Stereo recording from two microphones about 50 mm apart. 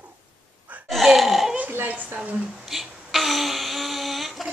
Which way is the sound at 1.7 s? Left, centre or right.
Right.